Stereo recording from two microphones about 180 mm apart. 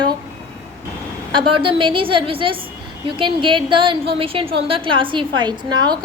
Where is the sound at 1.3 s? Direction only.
25° right (ahead or behind).